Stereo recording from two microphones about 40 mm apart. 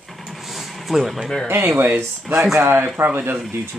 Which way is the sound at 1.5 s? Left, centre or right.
Right.